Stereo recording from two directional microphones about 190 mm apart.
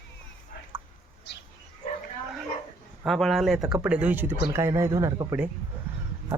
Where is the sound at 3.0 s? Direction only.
Centre (ahead or behind).